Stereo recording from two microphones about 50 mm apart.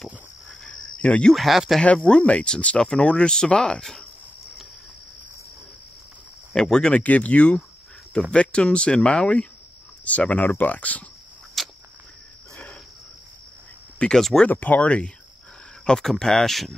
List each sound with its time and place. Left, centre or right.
0.7 s cricket: left
1.3 s speech: centre
1.9 s speech: left
6.5 s speech: centre
7.0 s speech: left
10.0 s speech: left
11.6 s a sound: centre
13.9 s speech: centre
14.2 s speech: centre
14.5 s speech: left
15.8 s speech: centre